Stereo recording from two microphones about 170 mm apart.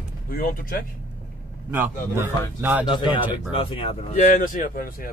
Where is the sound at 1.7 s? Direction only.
10° right (ahead or behind).